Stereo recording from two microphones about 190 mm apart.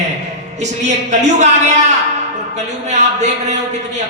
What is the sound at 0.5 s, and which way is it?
Speech, 35° right (ahead or behind).